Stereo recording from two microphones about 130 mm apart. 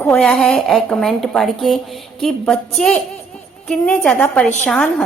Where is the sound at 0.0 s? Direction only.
5° left (ahead or behind).